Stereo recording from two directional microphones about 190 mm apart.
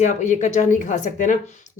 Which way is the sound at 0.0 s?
40° left (ahead or behind).